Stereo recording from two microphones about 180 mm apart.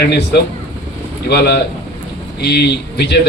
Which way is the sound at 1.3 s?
65° left (ahead or behind).